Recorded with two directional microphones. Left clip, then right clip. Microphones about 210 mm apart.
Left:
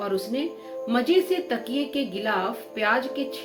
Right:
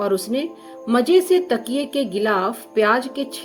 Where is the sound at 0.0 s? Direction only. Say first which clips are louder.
Right 6 dB; 60° right (ahead or behind).